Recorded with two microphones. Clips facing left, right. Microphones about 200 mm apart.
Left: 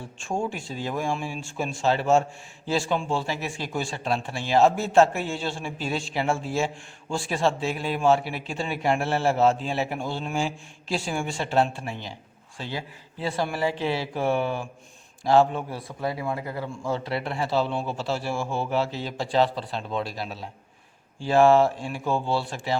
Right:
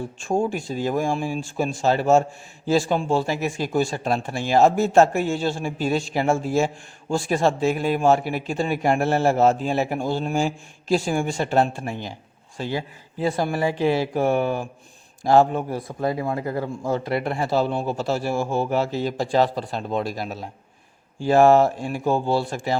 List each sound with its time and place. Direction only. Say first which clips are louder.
0.2 s a man's voice: right 6 dB; 40° right (ahead or behind)